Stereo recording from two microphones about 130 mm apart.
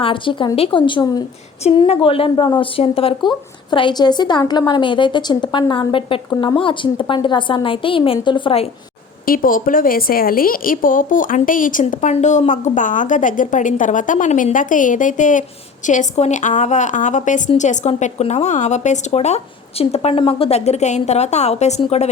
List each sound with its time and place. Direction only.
0.0 s speech: 40° left (ahead or behind)
9.2 s a woman's voice: 90° left
15.9 s a woman's voice: 65° left (ahead or behind)